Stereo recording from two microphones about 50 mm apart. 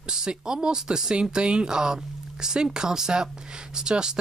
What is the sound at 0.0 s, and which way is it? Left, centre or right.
Speech, centre.